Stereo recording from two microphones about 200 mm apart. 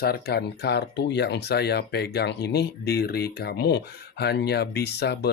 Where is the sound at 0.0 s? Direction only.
50° left (ahead or behind).